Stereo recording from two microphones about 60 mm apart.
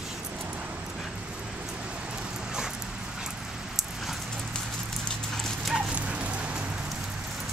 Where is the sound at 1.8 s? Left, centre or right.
Centre.